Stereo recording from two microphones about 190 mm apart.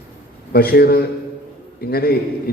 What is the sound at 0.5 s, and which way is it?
A man's voice, 55° left (ahead or behind).